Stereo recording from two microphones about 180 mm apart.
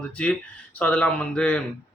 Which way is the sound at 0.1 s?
5° left (ahead or behind).